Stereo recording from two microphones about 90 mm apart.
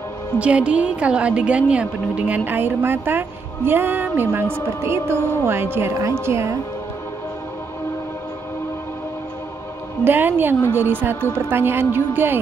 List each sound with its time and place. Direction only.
0.4 s a woman's voice: 10° right (ahead or behind); by 6.6 s 30° right (ahead or behind)
10.0 s a woman's voice: 20° right (ahead or behind)